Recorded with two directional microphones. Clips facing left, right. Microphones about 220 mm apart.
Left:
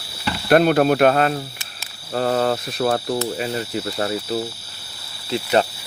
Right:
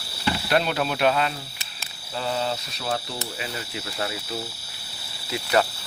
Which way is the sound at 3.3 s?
40° left (ahead or behind).